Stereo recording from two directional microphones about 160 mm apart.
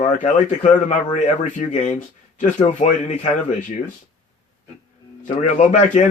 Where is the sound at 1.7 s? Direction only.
50° left (ahead or behind).